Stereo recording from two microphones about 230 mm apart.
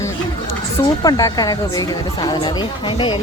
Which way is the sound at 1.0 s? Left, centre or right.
Centre.